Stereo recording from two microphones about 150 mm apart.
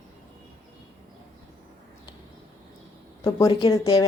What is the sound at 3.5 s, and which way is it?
Speech, 25° left (ahead or behind).